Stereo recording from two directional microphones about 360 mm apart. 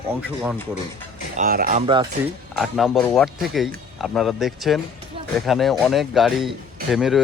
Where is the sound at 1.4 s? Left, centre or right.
Right.